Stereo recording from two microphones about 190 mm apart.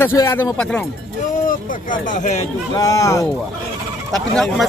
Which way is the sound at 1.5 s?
45° left (ahead or behind).